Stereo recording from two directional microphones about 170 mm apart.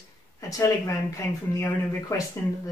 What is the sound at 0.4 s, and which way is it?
Speech, 20° left (ahead or behind).